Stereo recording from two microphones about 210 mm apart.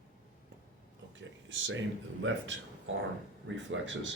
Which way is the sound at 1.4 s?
60° right (ahead or behind).